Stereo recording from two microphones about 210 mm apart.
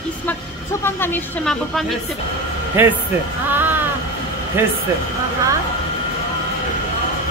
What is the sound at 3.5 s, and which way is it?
Music, 10° right (ahead or behind).